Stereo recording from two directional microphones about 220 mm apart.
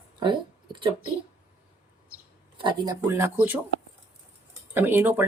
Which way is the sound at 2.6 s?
20° right (ahead or behind).